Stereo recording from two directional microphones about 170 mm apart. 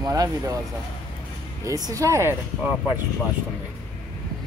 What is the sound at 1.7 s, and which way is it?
Speech, 20° right (ahead or behind).